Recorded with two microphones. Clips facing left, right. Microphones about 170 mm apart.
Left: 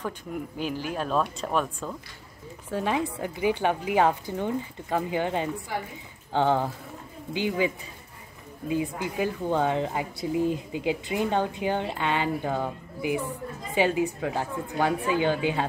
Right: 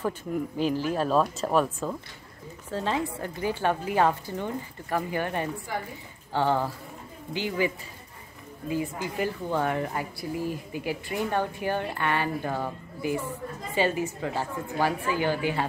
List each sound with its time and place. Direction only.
0.9 s speech: 5° right (ahead or behind)
2.7 s a woman's voice: 15° left (ahead or behind)